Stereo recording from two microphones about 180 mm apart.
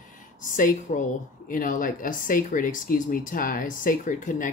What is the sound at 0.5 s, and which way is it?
Speech, 45° left (ahead or behind).